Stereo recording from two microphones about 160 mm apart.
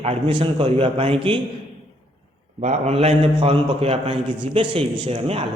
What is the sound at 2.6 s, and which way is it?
A man's voice, 45° right (ahead or behind).